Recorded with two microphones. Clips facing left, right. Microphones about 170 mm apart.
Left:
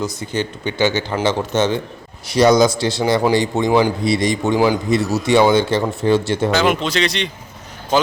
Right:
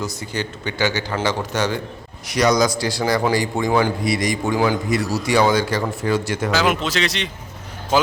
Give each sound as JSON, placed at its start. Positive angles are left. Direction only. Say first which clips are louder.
{"t": 0.0, "sound": "a man's voice", "louder": "left 4 dB", "side_deg": 20}
{"t": 6.5, "sound": "speech", "louder": "left 1 dB", "side_deg": -5}